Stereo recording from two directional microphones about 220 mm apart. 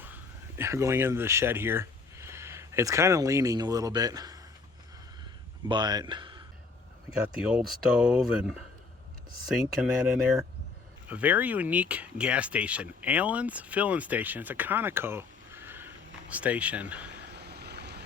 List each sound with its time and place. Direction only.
0.0 s speech: 10° right (ahead or behind)
5.6 s speech: 20° right (ahead or behind)
7.4 s speech: 5° right (ahead or behind)
17.2 s vehicle: 50° right (ahead or behind)